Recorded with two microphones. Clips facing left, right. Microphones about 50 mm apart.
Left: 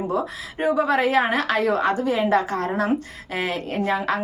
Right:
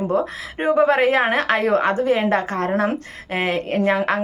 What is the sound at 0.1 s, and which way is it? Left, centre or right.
Speech, right.